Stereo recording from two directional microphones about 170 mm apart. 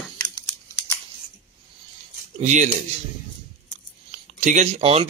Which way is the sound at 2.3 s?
45° right (ahead or behind).